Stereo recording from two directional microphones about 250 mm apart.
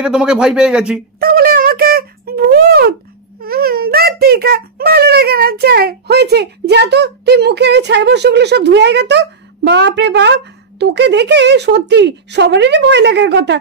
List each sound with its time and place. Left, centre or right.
0.0 s speech: centre
1.2 s a sound: right
3.4 s a child's voice: right